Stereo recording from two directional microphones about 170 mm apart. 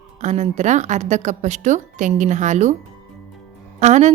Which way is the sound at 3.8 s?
45° right (ahead or behind).